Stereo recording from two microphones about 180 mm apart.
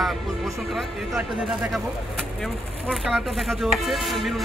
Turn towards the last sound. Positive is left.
turn(degrees=0)  # may be behind; listen again after turning